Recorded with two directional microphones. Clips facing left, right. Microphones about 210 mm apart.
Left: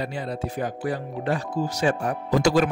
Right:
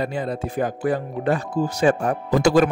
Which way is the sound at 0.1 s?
50° right (ahead or behind).